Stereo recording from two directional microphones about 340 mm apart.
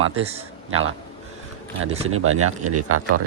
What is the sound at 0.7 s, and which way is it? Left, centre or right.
Speech, right.